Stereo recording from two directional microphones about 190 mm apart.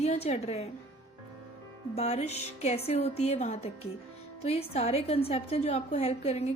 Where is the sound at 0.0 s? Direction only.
35° left (ahead or behind).